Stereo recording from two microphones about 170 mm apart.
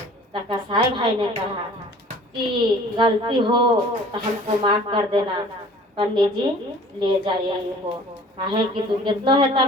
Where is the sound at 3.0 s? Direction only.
30° right (ahead or behind).